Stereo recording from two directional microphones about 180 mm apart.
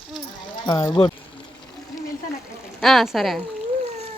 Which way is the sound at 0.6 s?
25° left (ahead or behind).